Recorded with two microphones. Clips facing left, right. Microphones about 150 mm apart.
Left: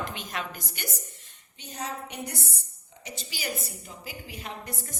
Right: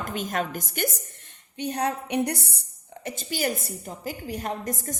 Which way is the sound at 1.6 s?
65° right (ahead or behind).